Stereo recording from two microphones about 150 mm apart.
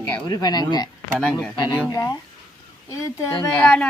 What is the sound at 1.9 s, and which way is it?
Speech, 20° left (ahead or behind).